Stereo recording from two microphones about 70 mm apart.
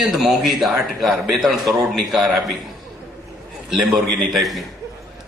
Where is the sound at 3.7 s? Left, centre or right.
Centre.